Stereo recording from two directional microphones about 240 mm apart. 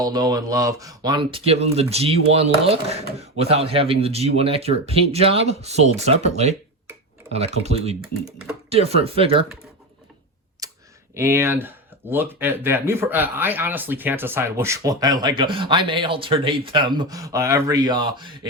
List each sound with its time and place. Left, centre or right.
0.0 s speech: centre
10.6 s clicking: centre
11.1 s speech: centre